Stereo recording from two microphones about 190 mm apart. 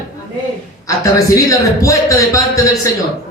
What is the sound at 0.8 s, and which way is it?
A man's voice, 15° left (ahead or behind).